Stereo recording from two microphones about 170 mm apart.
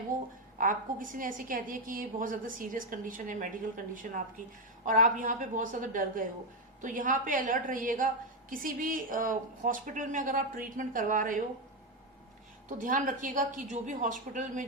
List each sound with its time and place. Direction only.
0.6 s a woman's voice: 50° right (ahead or behind)
12.6 s a woman's voice: 50° right (ahead or behind)